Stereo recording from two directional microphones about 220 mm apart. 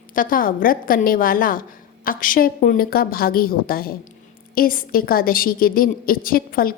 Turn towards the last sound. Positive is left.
turn(degrees=40)  # may be behind; listen again after turning